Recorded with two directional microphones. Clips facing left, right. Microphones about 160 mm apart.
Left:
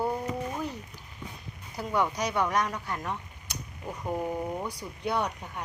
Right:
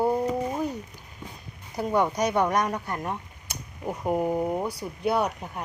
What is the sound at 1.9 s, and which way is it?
Speech, 20° right (ahead or behind).